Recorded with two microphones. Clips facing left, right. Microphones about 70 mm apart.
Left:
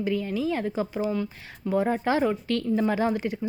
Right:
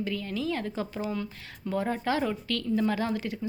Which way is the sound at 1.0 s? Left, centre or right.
Centre.